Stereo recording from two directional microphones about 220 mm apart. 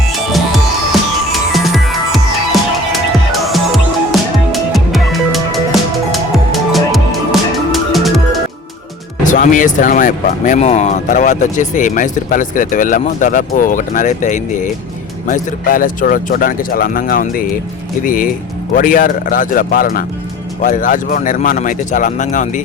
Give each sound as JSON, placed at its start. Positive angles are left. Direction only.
{"t": 0.1, "sound": "music", "side_deg": 0}
{"t": 9.2, "sound": "speech", "side_deg": 35}